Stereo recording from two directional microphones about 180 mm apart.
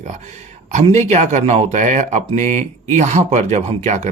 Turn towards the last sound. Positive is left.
turn(degrees=-40)  # may be behind; listen again after turning